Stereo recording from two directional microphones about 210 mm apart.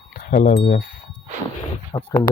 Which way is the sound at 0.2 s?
40° left (ahead or behind).